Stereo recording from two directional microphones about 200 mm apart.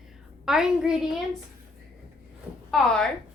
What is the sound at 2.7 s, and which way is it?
Speech, 5° left (ahead or behind).